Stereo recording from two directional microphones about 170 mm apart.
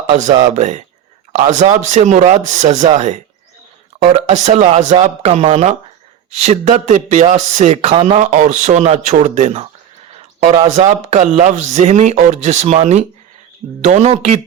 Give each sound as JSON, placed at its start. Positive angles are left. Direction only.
{"t": 0.1, "sound": "speech", "side_deg": -45}
{"t": 4.3, "sound": "speech", "side_deg": -45}
{"t": 10.2, "sound": "a sound", "side_deg": -40}
{"t": 11.1, "sound": "speech", "side_deg": -40}